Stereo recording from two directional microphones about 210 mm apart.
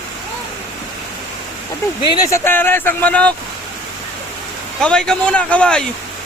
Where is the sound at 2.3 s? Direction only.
10° left (ahead or behind).